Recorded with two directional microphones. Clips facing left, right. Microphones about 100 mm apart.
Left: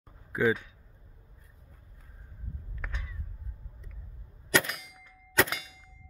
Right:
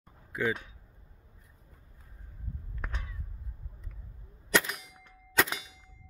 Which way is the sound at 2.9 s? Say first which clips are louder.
Right 1 dB; 20° right (ahead or behind).